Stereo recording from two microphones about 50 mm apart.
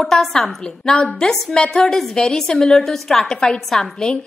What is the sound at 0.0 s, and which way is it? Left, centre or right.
A woman's voice, centre.